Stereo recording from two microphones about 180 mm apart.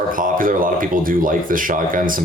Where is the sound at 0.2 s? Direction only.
50° right (ahead or behind).